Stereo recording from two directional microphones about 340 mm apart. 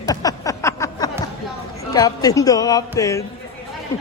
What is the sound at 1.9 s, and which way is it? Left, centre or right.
Speech, centre.